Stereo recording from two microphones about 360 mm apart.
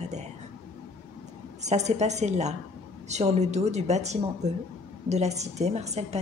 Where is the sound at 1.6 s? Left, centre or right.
Centre.